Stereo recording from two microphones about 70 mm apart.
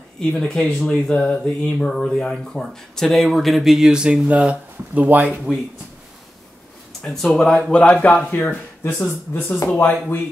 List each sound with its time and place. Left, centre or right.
0.2 s speech: centre; by 5.4 s right
7.0 s speech: centre
8.4 s speech: left